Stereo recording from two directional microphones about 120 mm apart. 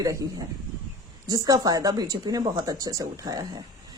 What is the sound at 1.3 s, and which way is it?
Speech, 30° right (ahead or behind).